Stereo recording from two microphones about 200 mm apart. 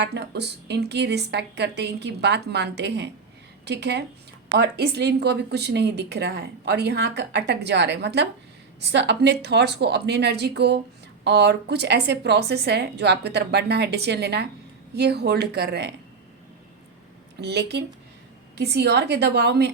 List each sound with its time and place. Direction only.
0.0 s speech: 55° right (ahead or behind)
17.4 s speech: 55° right (ahead or behind)